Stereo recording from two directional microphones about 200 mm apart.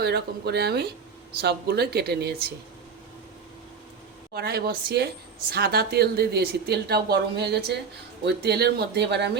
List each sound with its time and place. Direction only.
0.0 s a woman's voice: 55° right (ahead or behind)
4.4 s a woman's voice: 50° right (ahead or behind)